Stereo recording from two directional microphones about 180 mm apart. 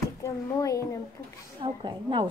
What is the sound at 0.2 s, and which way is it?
Speech, 20° left (ahead or behind).